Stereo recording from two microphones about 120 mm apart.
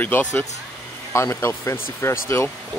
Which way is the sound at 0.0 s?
15° left (ahead or behind).